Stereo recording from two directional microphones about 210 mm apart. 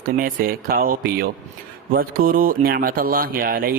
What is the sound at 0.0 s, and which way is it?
A man's voice, 45° right (ahead or behind).